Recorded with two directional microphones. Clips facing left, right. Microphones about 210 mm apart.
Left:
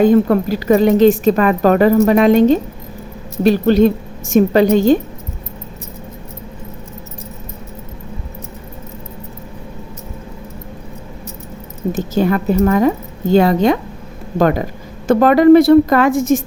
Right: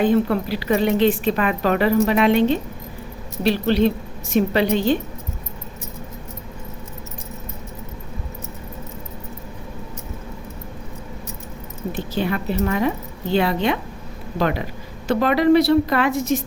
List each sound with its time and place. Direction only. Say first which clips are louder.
0.0 s a woman's voice: left 7 dB; 45° left (ahead or behind)
11.9 s a woman's voice: left 8 dB; 45° left (ahead or behind)